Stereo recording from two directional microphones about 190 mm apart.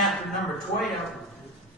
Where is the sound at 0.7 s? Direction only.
40° left (ahead or behind).